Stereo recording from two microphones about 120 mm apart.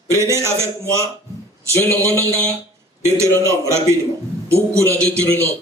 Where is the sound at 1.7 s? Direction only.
20° left (ahead or behind).